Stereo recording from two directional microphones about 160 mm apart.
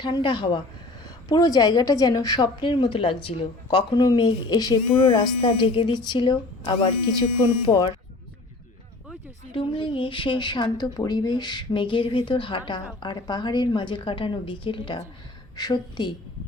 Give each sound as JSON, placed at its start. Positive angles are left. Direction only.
{"t": 0.0, "sound": "a woman's voice", "side_deg": 30}
{"t": 9.6, "sound": "a woman's voice", "side_deg": 30}